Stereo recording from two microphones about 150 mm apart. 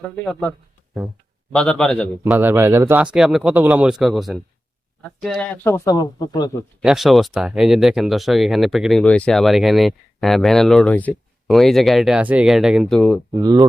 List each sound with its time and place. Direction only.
0.3 s speech: 5° left (ahead or behind)
1.5 s speech: 5° left (ahead or behind)
2.3 s speech: 15° right (ahead or behind); by 5.5 s 5° left (ahead or behind)
5.6 s speech: 20° left (ahead or behind)
6.8 s speech: centre (ahead or behind)
13.0 s speech: 5° left (ahead or behind)
13.4 s speech: 25° right (ahead or behind)